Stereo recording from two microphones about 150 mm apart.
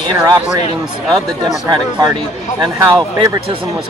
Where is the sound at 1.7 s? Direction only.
25° right (ahead or behind).